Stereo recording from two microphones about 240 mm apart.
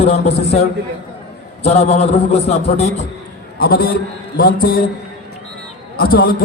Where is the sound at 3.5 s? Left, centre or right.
Left.